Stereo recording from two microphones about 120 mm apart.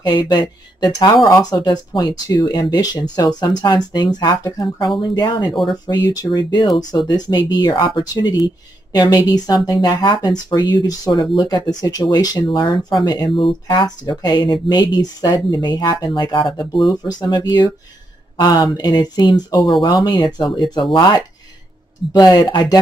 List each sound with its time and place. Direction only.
0.0 s speech: 40° left (ahead or behind)
13.3 s speech: 45° left (ahead or behind)